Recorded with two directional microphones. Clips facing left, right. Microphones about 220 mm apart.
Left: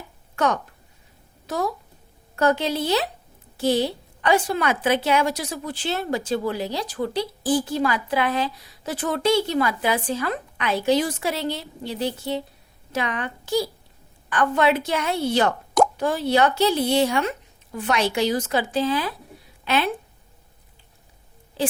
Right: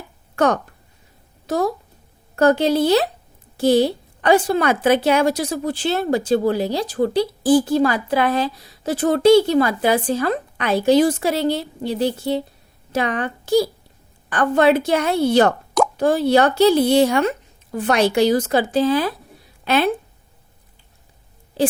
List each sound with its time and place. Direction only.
0.3 s a woman's voice: 40° right (ahead or behind)